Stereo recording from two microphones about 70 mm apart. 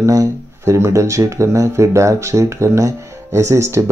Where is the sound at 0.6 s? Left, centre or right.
Right.